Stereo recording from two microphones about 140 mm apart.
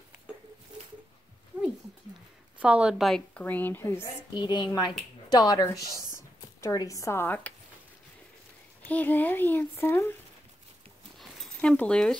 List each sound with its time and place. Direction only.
2.6 s a woman's voice: 10° right (ahead or behind)
3.3 s speech: 15° left (ahead or behind)
4.3 s a woman's voice: 30° left (ahead or behind); by 7.5 s 15° left (ahead or behind)
8.8 s speech: 10° left (ahead or behind)
11.1 s dog: centre (ahead or behind)